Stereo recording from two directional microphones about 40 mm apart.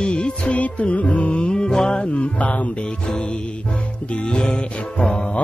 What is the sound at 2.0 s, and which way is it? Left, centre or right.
Music, left.